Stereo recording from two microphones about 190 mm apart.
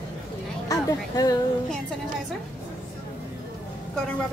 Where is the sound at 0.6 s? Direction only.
20° left (ahead or behind).